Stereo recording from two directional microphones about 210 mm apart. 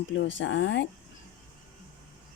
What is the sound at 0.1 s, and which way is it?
Speech, 60° left (ahead or behind).